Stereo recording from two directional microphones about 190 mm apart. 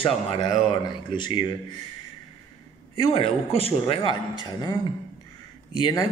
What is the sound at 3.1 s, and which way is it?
Speech, 30° left (ahead or behind).